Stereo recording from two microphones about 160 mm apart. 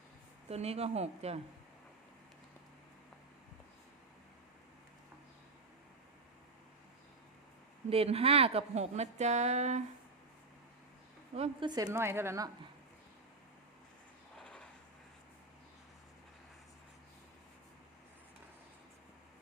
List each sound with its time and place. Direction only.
0.4 s speech: 40° right (ahead or behind)
7.9 s speech: 40° right (ahead or behind)
11.3 s speech: 40° right (ahead or behind)
11.7 s speech: 20° right (ahead or behind)
14.3 s a sound: 5° left (ahead or behind)